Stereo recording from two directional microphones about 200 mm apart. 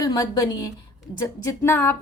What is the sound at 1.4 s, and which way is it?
Speech, 10° left (ahead or behind).